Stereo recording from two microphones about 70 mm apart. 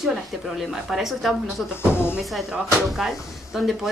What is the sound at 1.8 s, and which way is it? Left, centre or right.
Speech, left.